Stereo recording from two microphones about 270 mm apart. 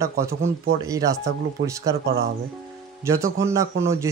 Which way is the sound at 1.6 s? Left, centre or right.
Right.